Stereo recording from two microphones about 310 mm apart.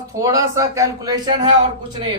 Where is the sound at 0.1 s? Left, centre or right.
Centre.